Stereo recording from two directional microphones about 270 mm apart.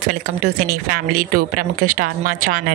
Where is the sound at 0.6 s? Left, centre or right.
Right.